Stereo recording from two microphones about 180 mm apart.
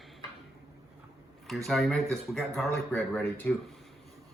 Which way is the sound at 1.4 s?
Centre (ahead or behind).